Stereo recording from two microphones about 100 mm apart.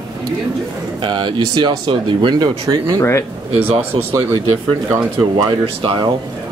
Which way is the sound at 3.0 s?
25° left (ahead or behind).